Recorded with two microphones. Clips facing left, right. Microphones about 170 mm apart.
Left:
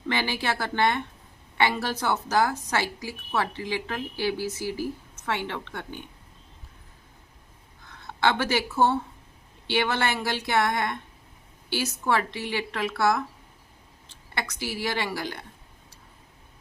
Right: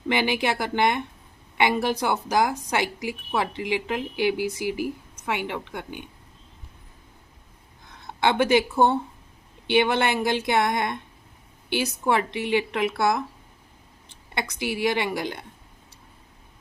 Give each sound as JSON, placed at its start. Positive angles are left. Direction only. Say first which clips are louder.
{"t": 0.1, "sound": "a woman's voice", "louder": "right 4 dB", "side_deg": -15}
{"t": 7.9, "sound": "speech", "louder": "right 1 dB", "side_deg": -20}